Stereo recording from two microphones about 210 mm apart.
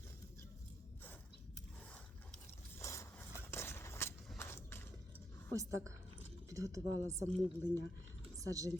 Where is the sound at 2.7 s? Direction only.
15° left (ahead or behind).